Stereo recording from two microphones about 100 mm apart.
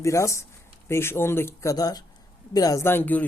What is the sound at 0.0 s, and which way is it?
Speech, 30° left (ahead or behind).